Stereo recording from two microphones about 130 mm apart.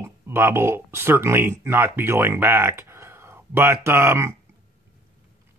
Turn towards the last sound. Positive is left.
turn(degrees=-20)  # may be behind; listen again after turning